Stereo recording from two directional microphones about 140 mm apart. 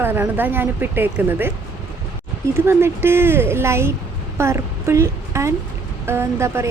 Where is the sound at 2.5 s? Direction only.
15° right (ahead or behind).